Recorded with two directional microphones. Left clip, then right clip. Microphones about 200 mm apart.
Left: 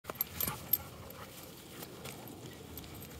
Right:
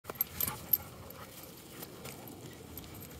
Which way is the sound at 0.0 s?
25° left (ahead or behind).